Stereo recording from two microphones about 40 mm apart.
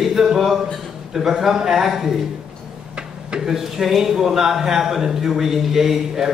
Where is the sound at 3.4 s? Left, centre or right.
Centre.